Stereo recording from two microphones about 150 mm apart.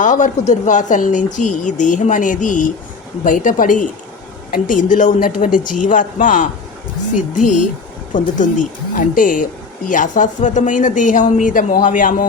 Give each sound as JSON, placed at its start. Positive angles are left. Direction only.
{"t": 0.0, "sound": "speech", "side_deg": 55}